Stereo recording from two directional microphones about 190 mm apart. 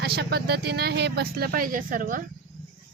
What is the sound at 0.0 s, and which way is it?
Speech, 55° right (ahead or behind).